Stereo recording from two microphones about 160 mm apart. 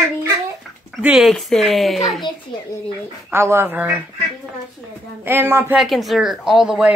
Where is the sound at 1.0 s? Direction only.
Centre (ahead or behind).